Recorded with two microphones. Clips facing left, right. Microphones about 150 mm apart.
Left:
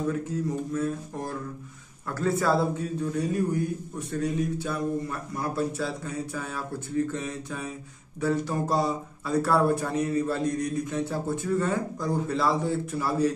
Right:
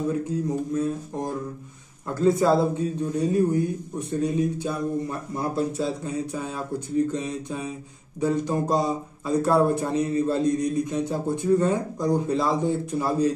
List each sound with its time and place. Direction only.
0.1 s speech: 15° right (ahead or behind)